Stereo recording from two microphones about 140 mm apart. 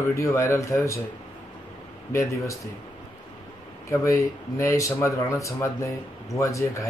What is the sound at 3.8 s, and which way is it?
Speech, 20° left (ahead or behind).